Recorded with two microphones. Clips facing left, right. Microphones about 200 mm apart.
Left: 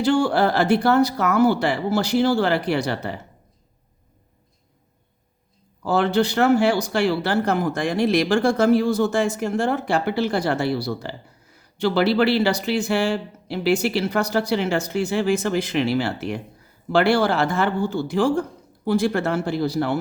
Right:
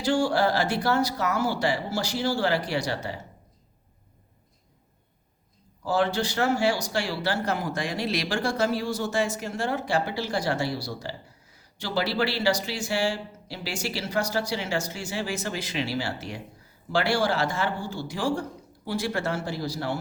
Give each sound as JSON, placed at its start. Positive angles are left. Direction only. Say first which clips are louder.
{"t": 0.0, "sound": "speech", "louder": "left 5 dB", "side_deg": 60}
{"t": 5.8, "sound": "speech", "louder": "left 6 dB", "side_deg": 60}